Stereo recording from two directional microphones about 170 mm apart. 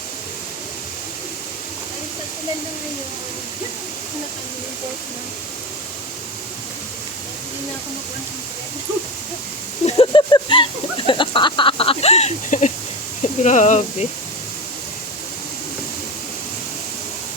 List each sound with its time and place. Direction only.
9.8 s speech: 30° left (ahead or behind)